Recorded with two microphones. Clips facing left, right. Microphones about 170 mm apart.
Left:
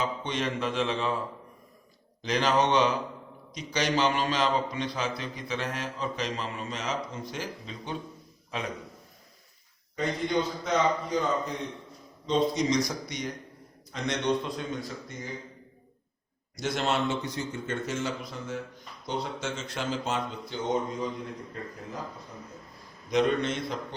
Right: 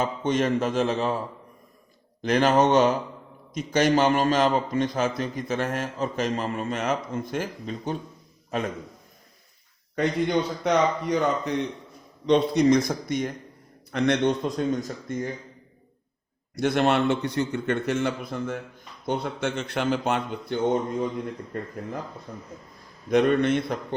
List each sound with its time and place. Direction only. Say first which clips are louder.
0.0 s a man's voice: right 6 dB; 45° right (ahead or behind)
2.2 s a man's voice: right 5 dB; 50° right (ahead or behind)
9.9 s a man's voice: right 5 dB; 65° right (ahead or behind); by 15.3 s 50° right (ahead or behind)
16.6 s a man's voice: right 7 dB; 60° right (ahead or behind)